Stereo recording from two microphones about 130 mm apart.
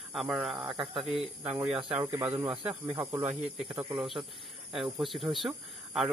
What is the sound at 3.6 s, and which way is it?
Speech, 5° right (ahead or behind).